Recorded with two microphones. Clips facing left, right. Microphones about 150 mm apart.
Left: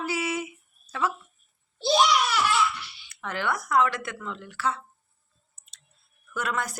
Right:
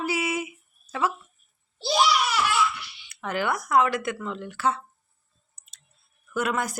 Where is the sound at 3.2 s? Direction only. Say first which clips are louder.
Right 2 dB; 10° right (ahead or behind).